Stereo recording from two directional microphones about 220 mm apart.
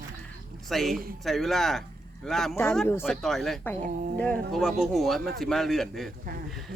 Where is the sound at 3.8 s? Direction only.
40° right (ahead or behind).